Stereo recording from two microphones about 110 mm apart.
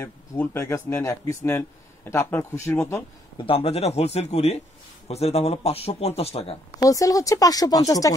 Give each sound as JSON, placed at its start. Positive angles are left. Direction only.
{"t": 0.0, "sound": "speech", "side_deg": 25}
{"t": 3.3, "sound": "a man's voice", "side_deg": 60}
{"t": 6.8, "sound": "speech", "side_deg": 30}